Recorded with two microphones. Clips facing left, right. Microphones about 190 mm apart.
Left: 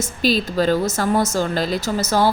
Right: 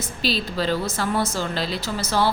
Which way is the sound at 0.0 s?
45° left (ahead or behind).